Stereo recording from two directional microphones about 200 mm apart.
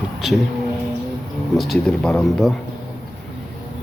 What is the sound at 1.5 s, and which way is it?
Speech, centre (ahead or behind).